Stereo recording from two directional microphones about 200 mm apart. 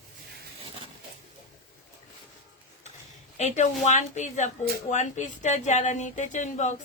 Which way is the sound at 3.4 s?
35° left (ahead or behind).